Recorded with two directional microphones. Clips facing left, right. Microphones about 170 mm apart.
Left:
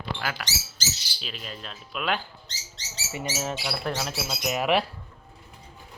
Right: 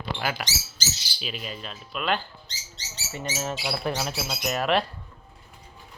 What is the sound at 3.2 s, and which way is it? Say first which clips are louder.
Speech: even; 5° left (ahead or behind).